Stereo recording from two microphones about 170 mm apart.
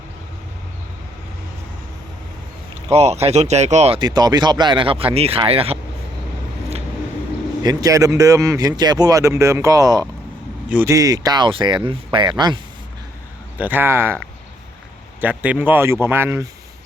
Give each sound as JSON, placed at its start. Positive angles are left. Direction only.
{"t": 2.9, "sound": "speech", "side_deg": -40}
{"t": 4.0, "sound": "speech", "side_deg": -25}
{"t": 7.6, "sound": "speech", "side_deg": -20}
{"t": 10.7, "sound": "speech", "side_deg": -10}
{"t": 10.9, "sound": "speech", "side_deg": -20}
{"t": 13.6, "sound": "speech", "side_deg": -10}